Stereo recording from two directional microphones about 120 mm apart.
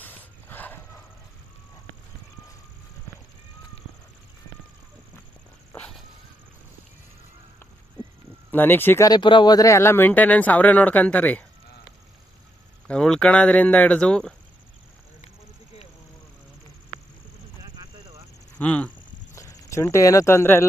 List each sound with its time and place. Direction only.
0.0 s dog: 15° left (ahead or behind)
8.5 s speech: 15° left (ahead or behind)
9.0 s speech: 40° left (ahead or behind); by 11.4 s 15° left (ahead or behind)
12.9 s speech: 5° left (ahead or behind)
18.6 s speech: 10° left (ahead or behind)
19.3 s speech: 25° left (ahead or behind)